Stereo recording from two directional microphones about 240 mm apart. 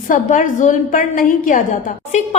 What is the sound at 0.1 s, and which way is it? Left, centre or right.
A woman's voice, left.